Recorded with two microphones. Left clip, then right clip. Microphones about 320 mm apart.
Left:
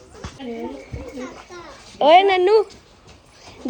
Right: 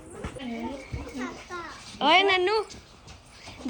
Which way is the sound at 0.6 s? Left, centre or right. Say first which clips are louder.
Left 4 dB; centre.